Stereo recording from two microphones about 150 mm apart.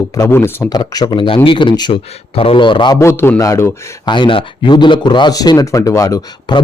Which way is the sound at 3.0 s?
15° left (ahead or behind).